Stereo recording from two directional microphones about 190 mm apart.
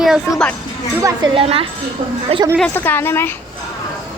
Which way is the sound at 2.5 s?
10° left (ahead or behind).